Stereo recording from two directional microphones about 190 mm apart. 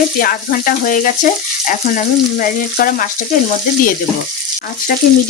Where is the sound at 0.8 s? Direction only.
45° left (ahead or behind).